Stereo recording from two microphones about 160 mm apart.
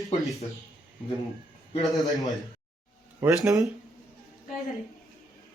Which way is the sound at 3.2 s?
10° right (ahead or behind).